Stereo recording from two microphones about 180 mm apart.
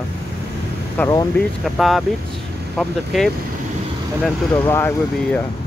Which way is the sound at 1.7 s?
Centre (ahead or behind).